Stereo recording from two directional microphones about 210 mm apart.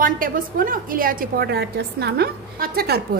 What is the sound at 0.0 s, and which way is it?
A woman's voice, 40° right (ahead or behind).